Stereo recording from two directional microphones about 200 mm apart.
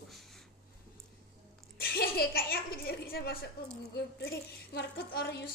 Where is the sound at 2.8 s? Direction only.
50° left (ahead or behind).